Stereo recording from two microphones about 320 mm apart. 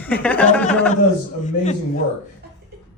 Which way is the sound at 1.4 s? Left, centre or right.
Left.